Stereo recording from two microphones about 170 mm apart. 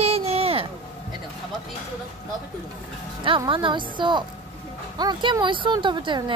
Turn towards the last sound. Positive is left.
turn(degrees=-30)  # may be behind; listen again after turning